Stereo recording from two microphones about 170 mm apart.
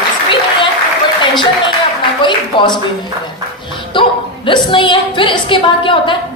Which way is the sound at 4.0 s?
30° left (ahead or behind).